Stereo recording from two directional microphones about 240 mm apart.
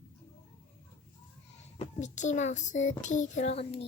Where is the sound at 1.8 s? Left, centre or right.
Left.